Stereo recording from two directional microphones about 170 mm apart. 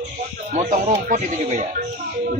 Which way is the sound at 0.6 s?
50° right (ahead or behind).